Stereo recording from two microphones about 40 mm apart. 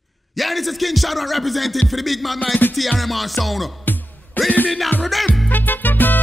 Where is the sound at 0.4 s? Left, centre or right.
Centre.